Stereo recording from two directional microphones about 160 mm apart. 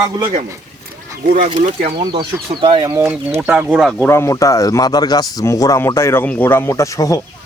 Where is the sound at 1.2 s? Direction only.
50° right (ahead or behind).